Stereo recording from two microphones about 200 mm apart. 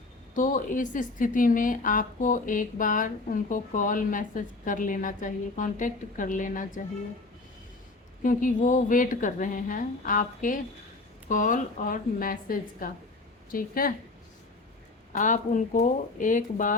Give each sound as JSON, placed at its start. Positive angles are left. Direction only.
{"t": 0.3, "sound": "a woman's voice", "side_deg": 40}
{"t": 8.2, "sound": "a woman's voice", "side_deg": 40}
{"t": 15.1, "sound": "a woman's voice", "side_deg": 40}